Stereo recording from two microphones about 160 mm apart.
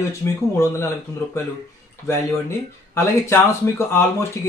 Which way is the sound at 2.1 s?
15° left (ahead or behind).